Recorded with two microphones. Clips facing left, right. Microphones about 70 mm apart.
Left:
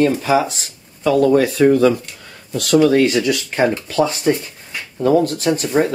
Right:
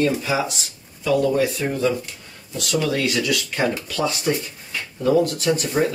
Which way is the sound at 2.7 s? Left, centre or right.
Left.